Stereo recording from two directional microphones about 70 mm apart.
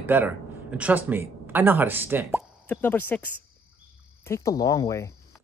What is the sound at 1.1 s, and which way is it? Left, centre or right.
Speech, right.